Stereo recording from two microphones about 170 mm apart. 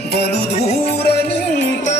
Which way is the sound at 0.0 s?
70° left (ahead or behind).